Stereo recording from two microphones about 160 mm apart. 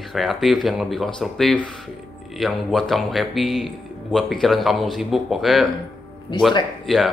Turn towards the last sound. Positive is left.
turn(degrees=0)  # may be behind; listen again after turning